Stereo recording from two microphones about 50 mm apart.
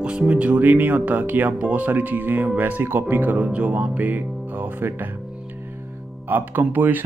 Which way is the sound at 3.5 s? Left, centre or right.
Right.